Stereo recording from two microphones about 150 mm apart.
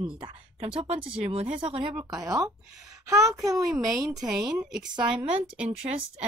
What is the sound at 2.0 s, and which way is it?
Speech, 20° right (ahead or behind).